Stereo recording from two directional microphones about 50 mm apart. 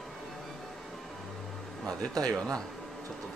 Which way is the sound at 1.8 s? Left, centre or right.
Centre.